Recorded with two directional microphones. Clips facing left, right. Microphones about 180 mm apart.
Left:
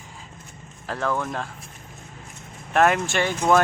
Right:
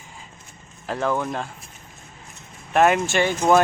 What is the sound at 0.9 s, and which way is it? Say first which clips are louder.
Speech: right 2 dB; 10° right (ahead or behind).